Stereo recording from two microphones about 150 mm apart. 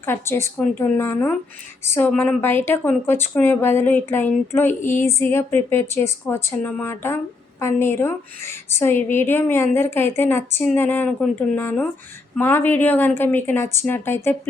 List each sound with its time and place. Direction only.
0.0 s a woman's voice: 15° left (ahead or behind)
4.8 s a sound: 55° left (ahead or behind)
5.0 s a woman's voice: 20° left (ahead or behind)